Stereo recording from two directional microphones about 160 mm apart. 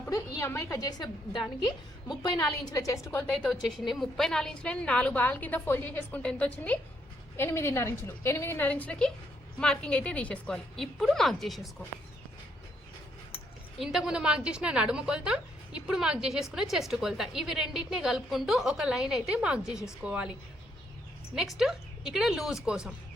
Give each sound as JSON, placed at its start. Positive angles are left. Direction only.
{"t": 0.1, "sound": "a woman's voice", "side_deg": 20}
{"t": 3.3, "sound": "a woman's voice", "side_deg": 0}
{"t": 13.7, "sound": "a woman's voice", "side_deg": 0}
{"t": 21.3, "sound": "a woman's voice", "side_deg": 0}